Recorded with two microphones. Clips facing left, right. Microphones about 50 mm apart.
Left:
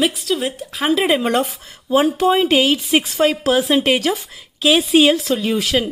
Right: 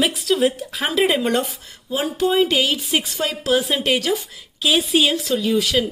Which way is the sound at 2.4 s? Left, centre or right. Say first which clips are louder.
Left 3 dB; centre.